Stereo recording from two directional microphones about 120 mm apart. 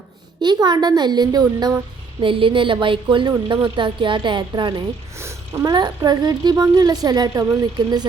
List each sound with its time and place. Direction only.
0.4 s speech: 35° right (ahead or behind)
2.2 s speech: 45° right (ahead or behind)